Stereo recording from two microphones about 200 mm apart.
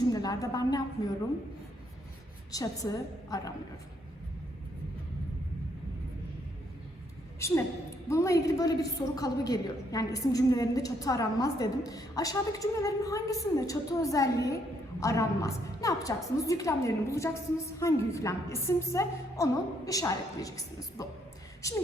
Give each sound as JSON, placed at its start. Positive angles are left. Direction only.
{"t": 0.1, "sound": "a woman's voice", "side_deg": 20}
{"t": 2.5, "sound": "a woman's voice", "side_deg": 15}
{"t": 7.3, "sound": "a woman's voice", "side_deg": 15}